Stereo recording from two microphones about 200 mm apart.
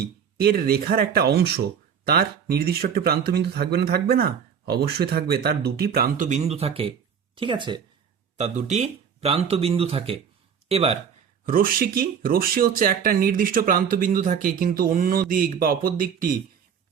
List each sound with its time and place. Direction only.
0.3 s speech: 50° right (ahead or behind); by 7.8 s 25° right (ahead or behind)
8.4 s speech: 35° right (ahead or behind)
11.4 s speech: 45° right (ahead or behind)